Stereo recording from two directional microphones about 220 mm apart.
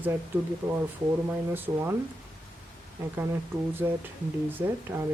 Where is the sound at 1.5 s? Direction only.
10° right (ahead or behind).